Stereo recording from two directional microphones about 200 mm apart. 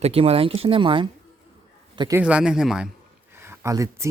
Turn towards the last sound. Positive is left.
turn(degrees=-15)  # may be behind; listen again after turning